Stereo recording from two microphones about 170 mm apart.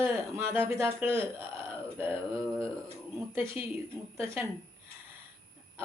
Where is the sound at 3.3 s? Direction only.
10° right (ahead or behind).